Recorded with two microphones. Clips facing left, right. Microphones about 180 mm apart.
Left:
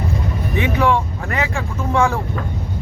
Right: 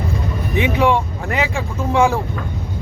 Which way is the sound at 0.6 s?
20° right (ahead or behind).